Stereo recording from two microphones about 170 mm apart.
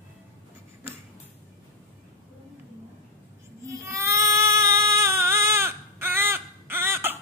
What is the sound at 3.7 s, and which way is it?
Baby cry, 20° right (ahead or behind).